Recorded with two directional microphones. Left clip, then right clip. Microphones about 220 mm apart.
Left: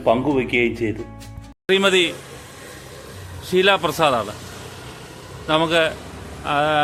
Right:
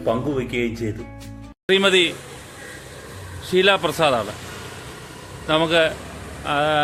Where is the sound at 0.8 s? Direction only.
20° left (ahead or behind).